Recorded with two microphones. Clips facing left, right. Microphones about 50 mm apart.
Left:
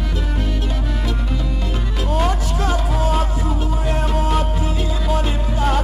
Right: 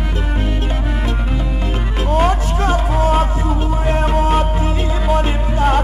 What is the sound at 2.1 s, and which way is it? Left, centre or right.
Music, right.